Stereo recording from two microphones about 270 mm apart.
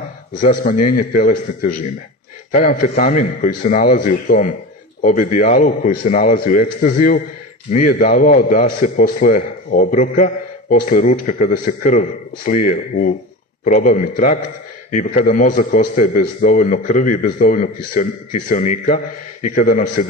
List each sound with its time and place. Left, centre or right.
0.6 s a man's voice: left